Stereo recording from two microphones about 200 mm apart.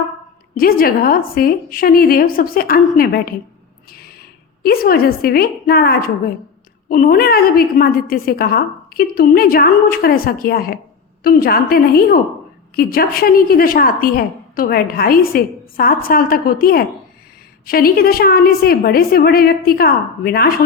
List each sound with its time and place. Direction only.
0.5 s a woman's voice: 45° left (ahead or behind)
4.6 s a woman's voice: 50° left (ahead or behind)